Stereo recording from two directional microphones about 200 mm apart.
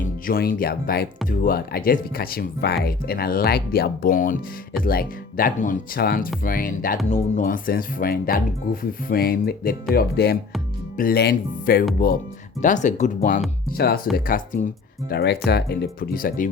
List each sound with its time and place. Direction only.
0.0 s speech: 50° left (ahead or behind)
13.7 s speech: 50° left (ahead or behind)
15.1 s speech: 55° left (ahead or behind)